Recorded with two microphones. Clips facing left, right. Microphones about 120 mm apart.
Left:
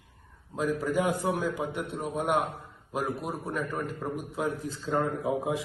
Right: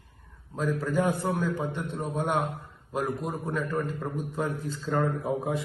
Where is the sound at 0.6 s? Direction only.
10° left (ahead or behind).